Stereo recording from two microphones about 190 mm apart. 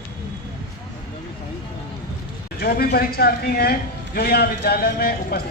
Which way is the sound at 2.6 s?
55° left (ahead or behind).